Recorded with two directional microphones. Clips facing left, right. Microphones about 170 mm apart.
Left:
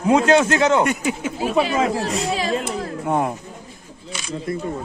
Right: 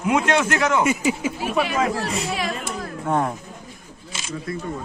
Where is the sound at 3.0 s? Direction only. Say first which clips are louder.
Left 1 dB; 10° left (ahead or behind).